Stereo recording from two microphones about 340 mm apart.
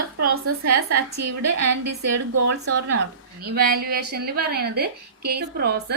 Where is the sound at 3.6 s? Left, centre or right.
Right.